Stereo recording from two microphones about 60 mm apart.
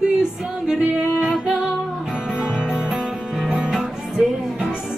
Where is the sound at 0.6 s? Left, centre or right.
Centre.